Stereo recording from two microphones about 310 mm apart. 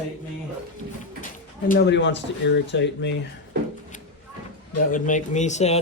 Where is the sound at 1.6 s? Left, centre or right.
Left.